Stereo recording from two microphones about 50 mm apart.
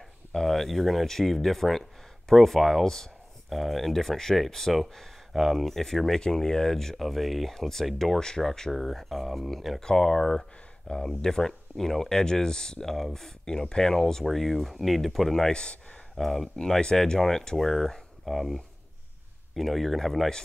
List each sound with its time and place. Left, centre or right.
0.3 s speech: centre
9.8 s speech: centre
16.2 s speech: centre